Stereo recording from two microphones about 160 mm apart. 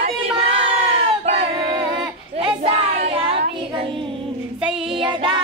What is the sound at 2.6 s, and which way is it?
Child singing, 40° right (ahead or behind).